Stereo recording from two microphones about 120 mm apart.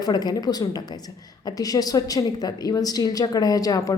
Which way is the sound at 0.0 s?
35° left (ahead or behind).